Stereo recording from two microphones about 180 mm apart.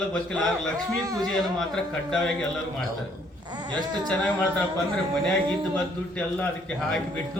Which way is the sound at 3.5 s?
25° right (ahead or behind).